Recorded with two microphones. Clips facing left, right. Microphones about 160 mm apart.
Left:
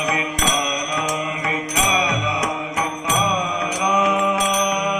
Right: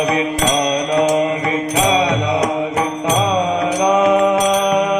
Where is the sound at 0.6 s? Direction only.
50° right (ahead or behind).